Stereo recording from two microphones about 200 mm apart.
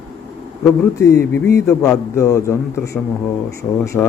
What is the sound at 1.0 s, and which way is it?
Speech, 15° left (ahead or behind).